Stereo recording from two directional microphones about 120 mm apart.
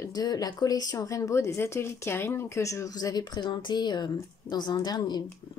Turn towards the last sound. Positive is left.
turn(degrees=35)  # may be behind; listen again after turning